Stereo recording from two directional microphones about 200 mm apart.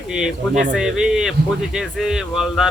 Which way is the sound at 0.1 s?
5° right (ahead or behind).